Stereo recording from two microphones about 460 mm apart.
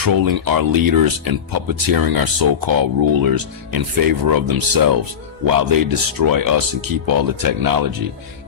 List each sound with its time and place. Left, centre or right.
0.0 s speech: right